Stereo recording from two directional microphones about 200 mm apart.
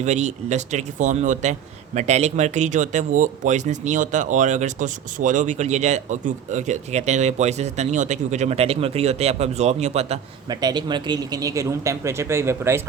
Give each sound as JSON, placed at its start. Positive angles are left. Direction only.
{"t": 0.0, "sound": "speech", "side_deg": -35}
{"t": 10.5, "sound": "speech", "side_deg": -20}